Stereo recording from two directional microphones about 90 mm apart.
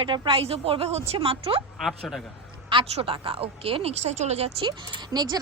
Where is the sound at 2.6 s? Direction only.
75° right (ahead or behind).